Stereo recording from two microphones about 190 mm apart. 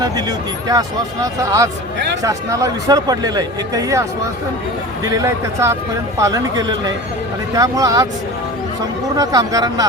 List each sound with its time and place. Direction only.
0.0 s speech: 20° right (ahead or behind)
5.0 s speech: 15° right (ahead or behind)
9.1 s speech: 20° right (ahead or behind)